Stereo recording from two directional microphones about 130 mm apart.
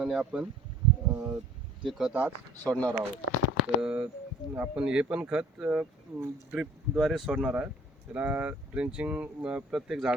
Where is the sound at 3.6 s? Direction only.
10° right (ahead or behind).